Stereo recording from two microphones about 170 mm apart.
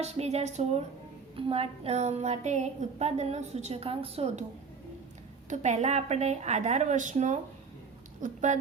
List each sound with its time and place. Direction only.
0.0 s a woman's voice: 40° right (ahead or behind)
5.5 s a woman's voice: 45° right (ahead or behind)